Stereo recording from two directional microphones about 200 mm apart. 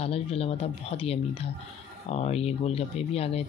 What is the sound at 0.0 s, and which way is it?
Speech, 30° left (ahead or behind).